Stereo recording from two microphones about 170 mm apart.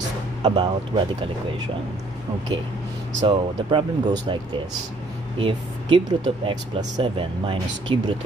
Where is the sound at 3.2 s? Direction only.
30° right (ahead or behind).